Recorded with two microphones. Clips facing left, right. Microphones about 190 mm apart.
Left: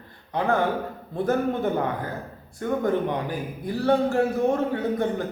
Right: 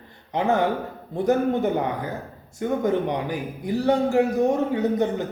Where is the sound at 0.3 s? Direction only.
20° right (ahead or behind).